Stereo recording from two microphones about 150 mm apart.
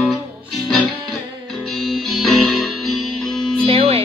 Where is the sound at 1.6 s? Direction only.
Centre (ahead or behind).